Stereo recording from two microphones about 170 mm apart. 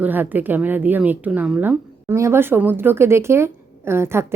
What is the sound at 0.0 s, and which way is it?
A woman's voice, 10° right (ahead or behind).